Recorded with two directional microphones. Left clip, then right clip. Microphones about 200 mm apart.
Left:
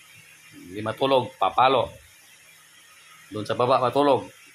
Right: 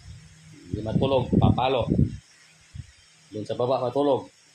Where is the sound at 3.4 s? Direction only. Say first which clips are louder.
Left 4 dB; 5° left (ahead or behind).